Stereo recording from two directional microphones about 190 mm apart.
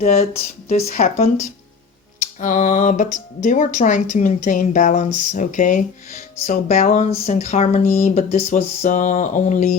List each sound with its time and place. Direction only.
0.7 s speech: 35° left (ahead or behind)